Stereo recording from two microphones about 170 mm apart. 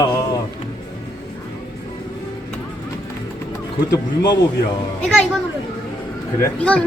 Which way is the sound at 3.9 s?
25° left (ahead or behind).